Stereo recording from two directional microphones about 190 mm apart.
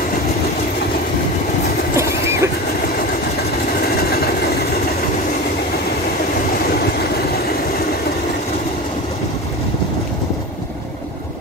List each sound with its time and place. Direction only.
2.0 s neigh: 15° right (ahead or behind)
3.9 s vehicle: 55° left (ahead or behind)